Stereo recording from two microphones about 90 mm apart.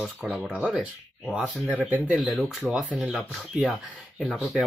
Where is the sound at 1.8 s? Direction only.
20° right (ahead or behind).